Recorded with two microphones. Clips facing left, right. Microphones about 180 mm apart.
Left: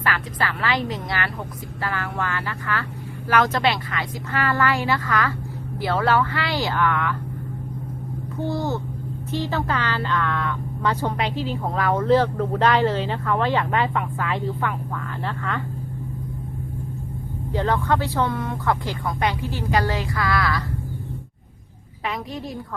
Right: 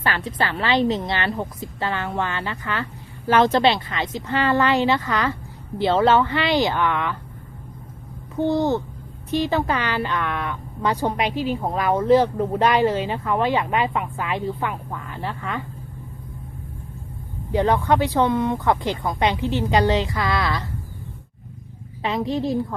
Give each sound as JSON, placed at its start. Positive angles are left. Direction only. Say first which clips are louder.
{"t": 0.0, "sound": "speech", "louder": "right 1 dB", "side_deg": -25}
{"t": 8.4, "sound": "speech", "louder": "right 5 dB", "side_deg": -20}
{"t": 17.5, "sound": "speech", "louder": "right 3 dB", "side_deg": -15}
{"t": 22.0, "sound": "speech", "louder": "right 7 dB", "side_deg": -30}